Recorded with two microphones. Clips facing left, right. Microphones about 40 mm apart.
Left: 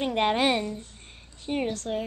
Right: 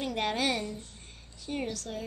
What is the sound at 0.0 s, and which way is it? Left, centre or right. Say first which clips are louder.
A woman's voice: left 6 dB; left.